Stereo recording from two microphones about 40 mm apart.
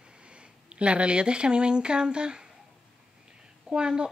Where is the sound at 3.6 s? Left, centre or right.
Right.